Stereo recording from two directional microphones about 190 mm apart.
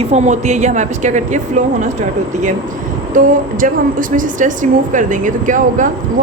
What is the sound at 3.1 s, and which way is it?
A woman's voice, 45° right (ahead or behind).